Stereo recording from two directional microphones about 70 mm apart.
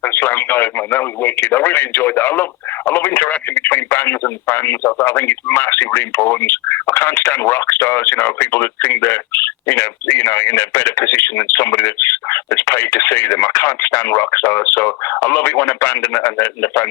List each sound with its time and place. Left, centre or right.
0.0 s speech: left